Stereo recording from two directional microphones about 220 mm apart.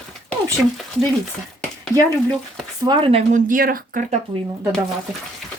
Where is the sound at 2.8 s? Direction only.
20° right (ahead or behind); by 4.1 s 40° right (ahead or behind).